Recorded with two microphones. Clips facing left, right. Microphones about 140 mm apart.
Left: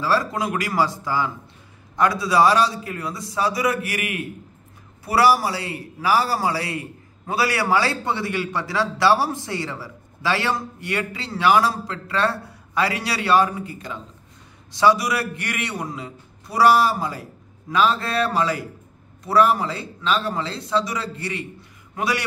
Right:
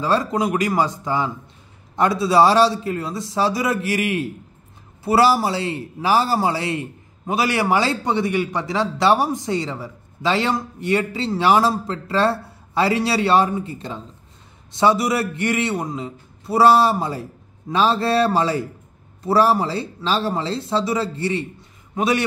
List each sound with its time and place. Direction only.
0.0 s a man's voice: 20° right (ahead or behind)